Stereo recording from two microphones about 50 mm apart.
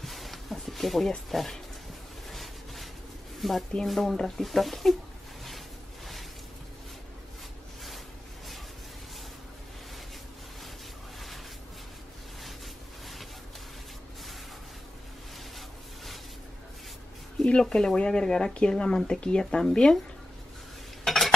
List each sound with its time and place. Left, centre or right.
0.0 s a sound: centre
1.3 s speech: centre
2.2 s a sound: centre
3.3 s speech: centre
17.6 s speech: centre
21.0 s cutlery: centre